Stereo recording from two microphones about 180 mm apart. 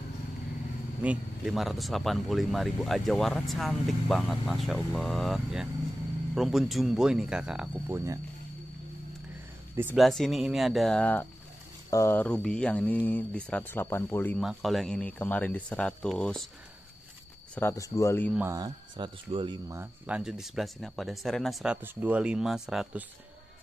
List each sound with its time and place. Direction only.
1.0 s speech: 5° right (ahead or behind)
9.9 s speech: centre (ahead or behind)
14.4 s speech: centre (ahead or behind)
17.6 s speech: 15° left (ahead or behind)
18.5 s speech: 25° right (ahead or behind)
19.8 s speech: 5° right (ahead or behind)